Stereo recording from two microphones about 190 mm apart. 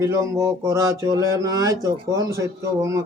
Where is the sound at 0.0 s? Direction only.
15° right (ahead or behind).